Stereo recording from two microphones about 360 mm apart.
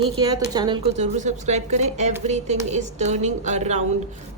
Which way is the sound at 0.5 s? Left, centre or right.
Centre.